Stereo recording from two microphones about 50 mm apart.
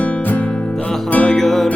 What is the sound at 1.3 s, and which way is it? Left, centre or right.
Music, centre.